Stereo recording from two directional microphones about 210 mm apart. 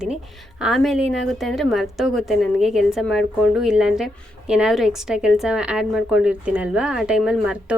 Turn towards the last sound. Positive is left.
turn(degrees=-5)  # may be behind; listen again after turning